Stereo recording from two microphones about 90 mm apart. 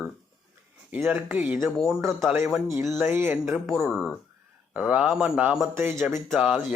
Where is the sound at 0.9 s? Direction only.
20° right (ahead or behind).